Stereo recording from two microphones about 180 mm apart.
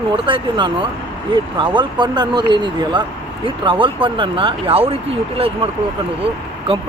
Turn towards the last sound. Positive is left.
turn(degrees=-30)  # may be behind; listen again after turning